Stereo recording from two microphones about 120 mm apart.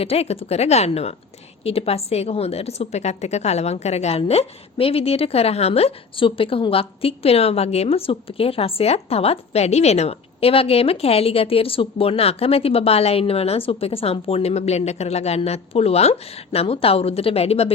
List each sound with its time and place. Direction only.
0.0 s a woman's voice: 55° left (ahead or behind)